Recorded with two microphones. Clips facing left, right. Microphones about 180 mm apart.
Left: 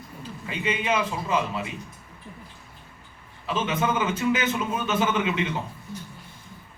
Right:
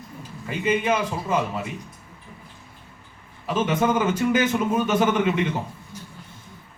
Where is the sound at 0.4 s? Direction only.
50° right (ahead or behind).